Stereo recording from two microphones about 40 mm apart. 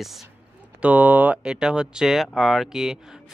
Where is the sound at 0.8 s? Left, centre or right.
Right.